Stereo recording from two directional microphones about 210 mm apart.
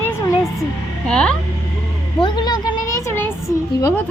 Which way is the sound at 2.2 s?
20° left (ahead or behind).